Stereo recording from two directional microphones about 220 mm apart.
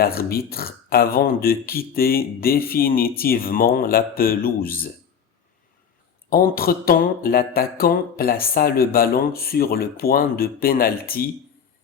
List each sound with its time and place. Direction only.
0.0 s speech: 45° left (ahead or behind)
6.3 s speech: 40° left (ahead or behind)